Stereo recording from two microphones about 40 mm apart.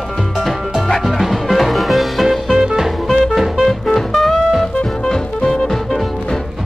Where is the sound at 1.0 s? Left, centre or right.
Centre.